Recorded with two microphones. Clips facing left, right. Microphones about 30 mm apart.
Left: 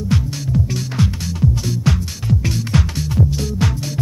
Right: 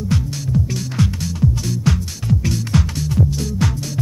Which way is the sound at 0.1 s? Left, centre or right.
Left.